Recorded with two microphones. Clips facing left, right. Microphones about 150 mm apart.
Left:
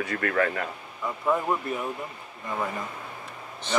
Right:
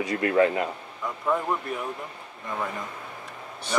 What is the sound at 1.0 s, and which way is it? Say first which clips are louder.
Speech: left 1 dB; 5° left (ahead or behind).